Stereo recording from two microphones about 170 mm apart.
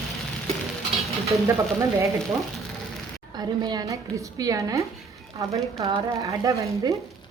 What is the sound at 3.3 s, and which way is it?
A woman's voice, 25° right (ahead or behind).